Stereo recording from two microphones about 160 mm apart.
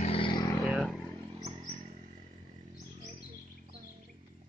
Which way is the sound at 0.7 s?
Centre (ahead or behind).